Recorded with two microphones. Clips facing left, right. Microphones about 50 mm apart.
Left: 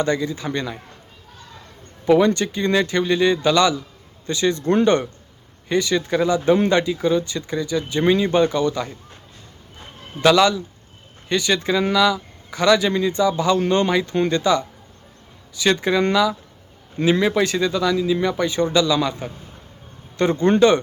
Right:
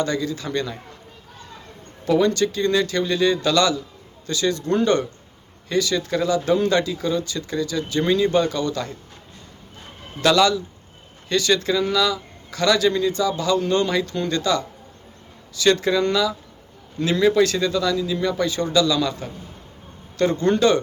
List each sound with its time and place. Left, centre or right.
0.0 s speech: left
2.0 s speech: left
10.2 s speech: left